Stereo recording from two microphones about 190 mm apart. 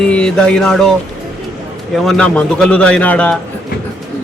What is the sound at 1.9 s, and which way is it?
A man's voice, centre (ahead or behind).